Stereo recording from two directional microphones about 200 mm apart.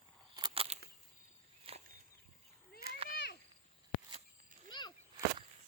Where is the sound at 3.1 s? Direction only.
55° left (ahead or behind).